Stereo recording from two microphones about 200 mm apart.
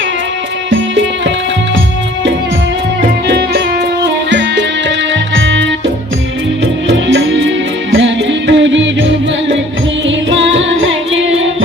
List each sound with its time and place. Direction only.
0.7 s music: 70° right (ahead or behind)
3.0 s music: 55° right (ahead or behind)
7.1 s music: 70° right (ahead or behind)